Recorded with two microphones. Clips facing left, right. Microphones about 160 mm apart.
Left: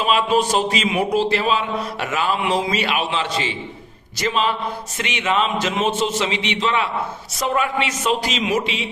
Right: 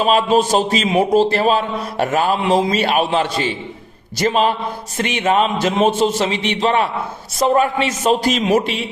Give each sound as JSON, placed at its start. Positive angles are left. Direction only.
{"t": 0.0, "sound": "a man's voice", "side_deg": -40}
{"t": 7.3, "sound": "a man's voice", "side_deg": -35}